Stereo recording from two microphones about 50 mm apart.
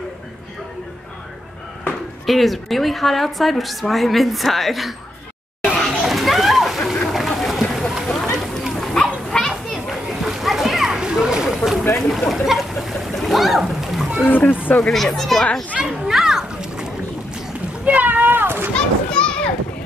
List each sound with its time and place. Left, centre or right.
2.2 s a woman's voice: centre
5.9 s children playing: centre
7.1 s a sound: centre
8.1 s a sound: centre
8.7 s dog: centre
10.0 s splash: centre
10.9 s a sound: centre
12.1 s splash: centre
14.2 s speech: left
14.8 s a woman's voice: centre
15.8 s children playing: centre
17.8 s a sound: right
18.8 s children playing: centre